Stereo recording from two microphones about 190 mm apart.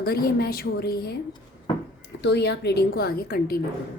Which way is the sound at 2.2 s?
60° left (ahead or behind).